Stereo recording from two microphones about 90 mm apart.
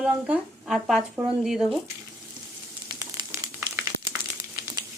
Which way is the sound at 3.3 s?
25° right (ahead or behind).